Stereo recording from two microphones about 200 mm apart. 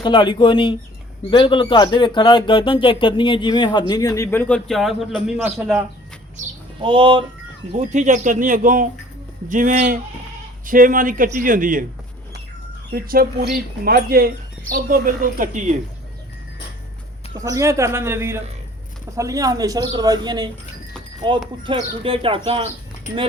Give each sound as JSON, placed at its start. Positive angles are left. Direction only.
{"t": 0.0, "sound": "speech", "side_deg": 25}
{"t": 6.7, "sound": "speech", "side_deg": -25}
{"t": 7.9, "sound": "speech", "side_deg": -35}
{"t": 12.9, "sound": "speech", "side_deg": -50}
{"t": 17.3, "sound": "speech", "side_deg": -15}